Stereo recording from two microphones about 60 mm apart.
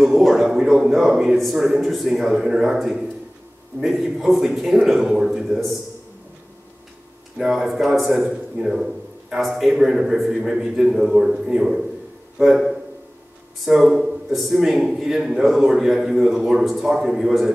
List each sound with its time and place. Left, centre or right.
0.0 s a man's voice: centre
7.3 s a man's voice: centre